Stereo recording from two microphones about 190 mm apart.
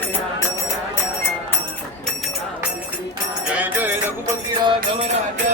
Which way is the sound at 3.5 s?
10° right (ahead or behind).